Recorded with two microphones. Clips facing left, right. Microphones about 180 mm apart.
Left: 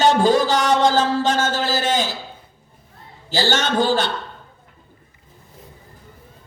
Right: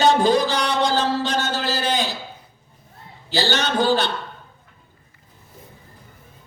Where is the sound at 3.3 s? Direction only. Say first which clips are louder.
Left 2 dB; 45° left (ahead or behind).